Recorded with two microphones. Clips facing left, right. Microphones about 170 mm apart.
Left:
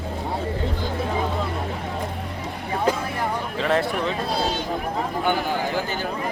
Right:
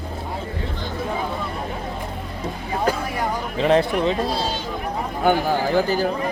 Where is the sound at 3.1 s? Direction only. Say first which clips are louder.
Right 2 dB; 20° right (ahead or behind).